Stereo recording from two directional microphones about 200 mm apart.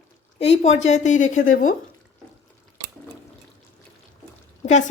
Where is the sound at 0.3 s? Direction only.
30° left (ahead or behind).